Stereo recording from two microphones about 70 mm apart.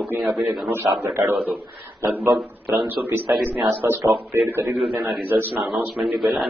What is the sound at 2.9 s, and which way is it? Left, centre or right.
Speech, right.